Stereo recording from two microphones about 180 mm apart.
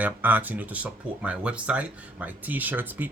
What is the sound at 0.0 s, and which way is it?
Speech, 10° right (ahead or behind).